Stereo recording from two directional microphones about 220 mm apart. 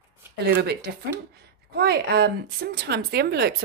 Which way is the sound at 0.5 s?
45° right (ahead or behind).